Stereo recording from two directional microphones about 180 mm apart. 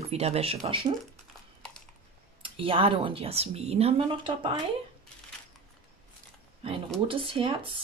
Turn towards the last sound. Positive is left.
turn(degrees=-30)  # may be behind; listen again after turning